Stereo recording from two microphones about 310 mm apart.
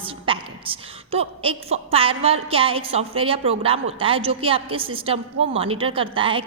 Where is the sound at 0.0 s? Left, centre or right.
Centre.